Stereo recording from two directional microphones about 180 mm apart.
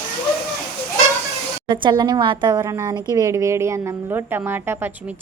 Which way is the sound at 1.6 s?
25° right (ahead or behind).